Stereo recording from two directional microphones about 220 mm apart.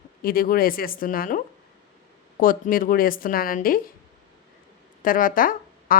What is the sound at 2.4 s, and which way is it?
Speech, 40° left (ahead or behind).